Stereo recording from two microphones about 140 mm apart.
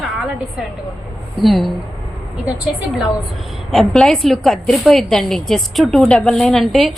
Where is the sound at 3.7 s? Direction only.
Centre (ahead or behind).